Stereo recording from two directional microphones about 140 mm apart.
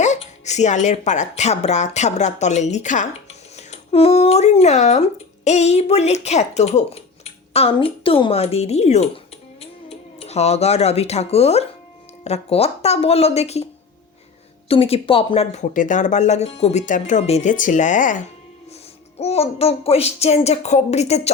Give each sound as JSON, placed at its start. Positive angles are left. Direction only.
{"t": 0.0, "sound": "speech", "side_deg": 55}
{"t": 3.7, "sound": "speech", "side_deg": 45}
{"t": 14.7, "sound": "speech", "side_deg": 45}
{"t": 15.7, "sound": "speech", "side_deg": 65}
{"t": 19.1, "sound": "speech", "side_deg": 50}